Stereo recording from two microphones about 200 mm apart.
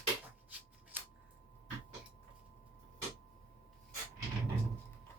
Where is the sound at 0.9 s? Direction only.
10° right (ahead or behind).